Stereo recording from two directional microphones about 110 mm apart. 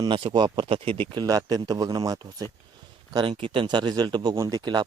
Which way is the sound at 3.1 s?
50° right (ahead or behind).